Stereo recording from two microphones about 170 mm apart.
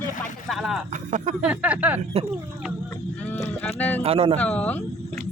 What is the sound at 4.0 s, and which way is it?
Speech, 35° right (ahead or behind).